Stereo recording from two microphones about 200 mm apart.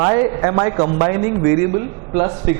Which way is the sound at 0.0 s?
20° right (ahead or behind).